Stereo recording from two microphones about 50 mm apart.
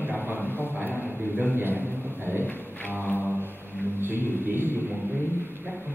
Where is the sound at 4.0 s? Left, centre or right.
Right.